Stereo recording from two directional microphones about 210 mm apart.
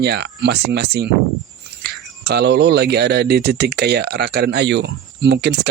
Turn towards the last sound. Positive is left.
turn(degrees=-55)  # may be behind; listen again after turning